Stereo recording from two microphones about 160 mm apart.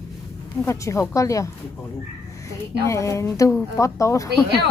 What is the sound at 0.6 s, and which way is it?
A woman's voice, 20° left (ahead or behind).